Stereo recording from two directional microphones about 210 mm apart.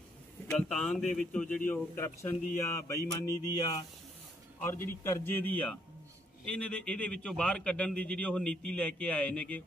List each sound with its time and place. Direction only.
0.5 s a man's voice: 5° left (ahead or behind)